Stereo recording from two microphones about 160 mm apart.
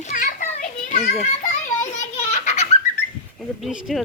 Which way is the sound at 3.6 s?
5° right (ahead or behind).